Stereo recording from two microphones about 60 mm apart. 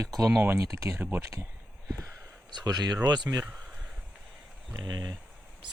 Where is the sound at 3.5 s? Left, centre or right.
Centre.